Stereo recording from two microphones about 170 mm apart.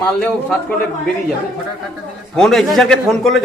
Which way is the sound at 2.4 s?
Centre (ahead or behind).